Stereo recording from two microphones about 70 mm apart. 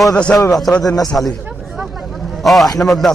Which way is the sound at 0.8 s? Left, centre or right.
Left.